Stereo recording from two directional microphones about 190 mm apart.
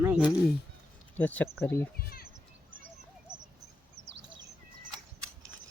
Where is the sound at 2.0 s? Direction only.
50° left (ahead or behind).